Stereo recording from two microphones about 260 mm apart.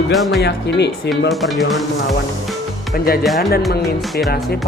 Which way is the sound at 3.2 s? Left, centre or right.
Centre.